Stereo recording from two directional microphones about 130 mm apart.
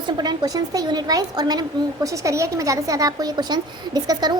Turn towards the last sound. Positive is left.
turn(degrees=-30)  # may be behind; listen again after turning